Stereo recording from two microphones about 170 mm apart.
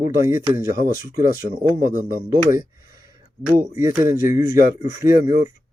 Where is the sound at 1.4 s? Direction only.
75° right (ahead or behind).